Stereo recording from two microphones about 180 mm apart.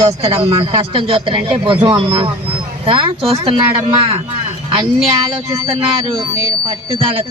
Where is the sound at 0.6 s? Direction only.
30° right (ahead or behind).